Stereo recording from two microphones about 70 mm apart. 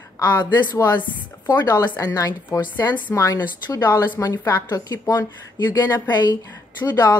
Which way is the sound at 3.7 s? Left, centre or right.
Left.